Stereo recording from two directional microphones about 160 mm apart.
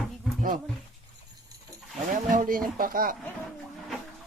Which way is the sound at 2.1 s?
55° right (ahead or behind).